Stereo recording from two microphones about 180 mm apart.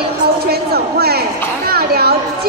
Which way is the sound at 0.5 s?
60° right (ahead or behind).